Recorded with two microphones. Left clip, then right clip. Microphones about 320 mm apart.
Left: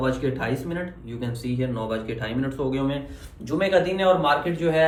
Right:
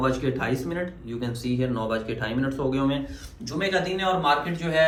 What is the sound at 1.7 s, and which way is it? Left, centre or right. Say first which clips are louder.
Speech: right 1 dB; left.